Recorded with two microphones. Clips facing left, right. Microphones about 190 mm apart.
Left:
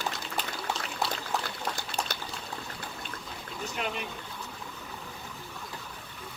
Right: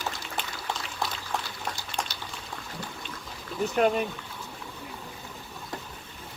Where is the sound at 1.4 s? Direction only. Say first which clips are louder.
Left 1 dB; 55° left (ahead or behind).